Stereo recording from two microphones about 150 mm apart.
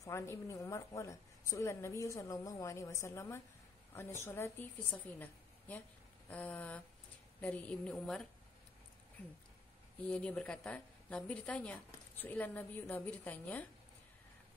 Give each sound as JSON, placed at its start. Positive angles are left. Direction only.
{"t": 0.0, "sound": "a woman's voice", "side_deg": 20}
{"t": 6.2, "sound": "a woman's voice", "side_deg": 10}
{"t": 10.0, "sound": "a woman's voice", "side_deg": 5}